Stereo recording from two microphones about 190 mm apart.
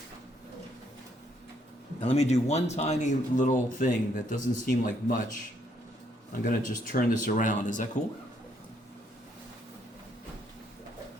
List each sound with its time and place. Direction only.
2.0 s a man's voice: 35° left (ahead or behind)
6.4 s speech: 45° left (ahead or behind)